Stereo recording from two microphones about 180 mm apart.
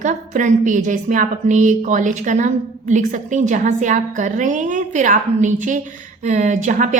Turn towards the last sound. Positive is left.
turn(degrees=-45)  # may be behind; listen again after turning